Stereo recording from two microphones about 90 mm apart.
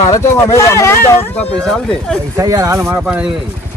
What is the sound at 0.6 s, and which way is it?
Speech, 30° left (ahead or behind).